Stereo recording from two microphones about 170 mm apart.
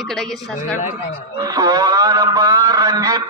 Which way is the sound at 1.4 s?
20° right (ahead or behind).